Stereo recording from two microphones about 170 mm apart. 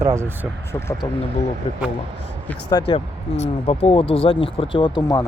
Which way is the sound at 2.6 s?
25° left (ahead or behind).